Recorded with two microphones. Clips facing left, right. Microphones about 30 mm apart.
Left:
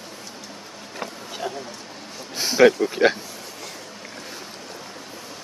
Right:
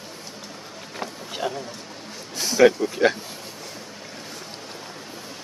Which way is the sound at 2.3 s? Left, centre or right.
Left.